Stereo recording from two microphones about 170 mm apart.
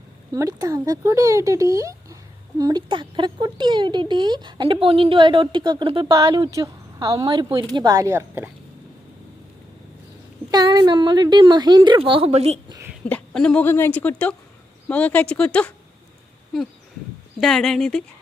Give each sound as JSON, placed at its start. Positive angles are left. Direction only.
{"t": 0.3, "sound": "speech", "side_deg": -20}
{"t": 10.5, "sound": "speech", "side_deg": -25}
{"t": 12.6, "sound": "a sound", "side_deg": -20}
{"t": 13.1, "sound": "speech", "side_deg": 5}
{"t": 17.4, "sound": "speech", "side_deg": 0}